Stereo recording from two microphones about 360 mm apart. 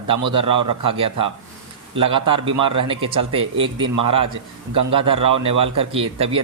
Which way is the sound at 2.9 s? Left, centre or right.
Centre.